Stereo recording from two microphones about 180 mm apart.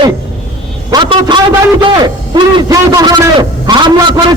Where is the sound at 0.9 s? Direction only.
25° right (ahead or behind).